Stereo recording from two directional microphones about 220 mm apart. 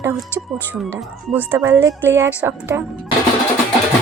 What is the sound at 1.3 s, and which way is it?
A woman's voice, 10° right (ahead or behind).